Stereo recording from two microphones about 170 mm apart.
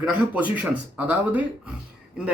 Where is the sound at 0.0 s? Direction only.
10° right (ahead or behind).